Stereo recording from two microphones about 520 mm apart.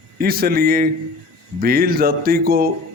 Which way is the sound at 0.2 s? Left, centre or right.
Centre.